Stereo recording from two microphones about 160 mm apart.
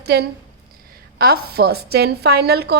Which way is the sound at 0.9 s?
75° right (ahead or behind).